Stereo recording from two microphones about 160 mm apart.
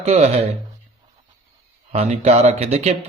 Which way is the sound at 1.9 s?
40° right (ahead or behind).